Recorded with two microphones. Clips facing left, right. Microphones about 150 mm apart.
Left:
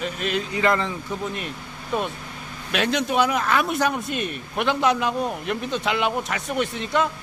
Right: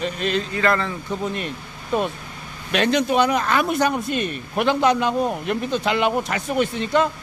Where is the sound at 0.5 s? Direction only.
15° left (ahead or behind).